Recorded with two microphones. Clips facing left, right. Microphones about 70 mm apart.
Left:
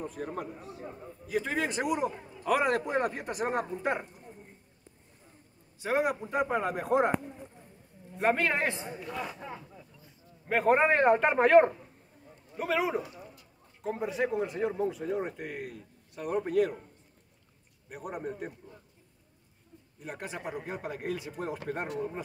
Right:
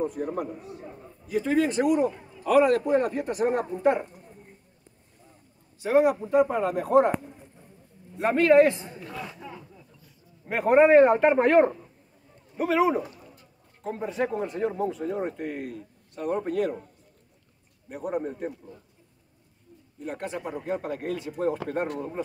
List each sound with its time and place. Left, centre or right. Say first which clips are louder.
0.1 s a man's voice: right 6 dB; centre
3.2 s a man's voice: right 6 dB; centre
5.8 s a man's voice: right 7 dB; centre
8.4 s a man's voice: right 12 dB; centre
10.5 s speech: right 7 dB; centre
17.8 s speech: right 7 dB; centre
20.0 s a man's voice: right 6 dB; centre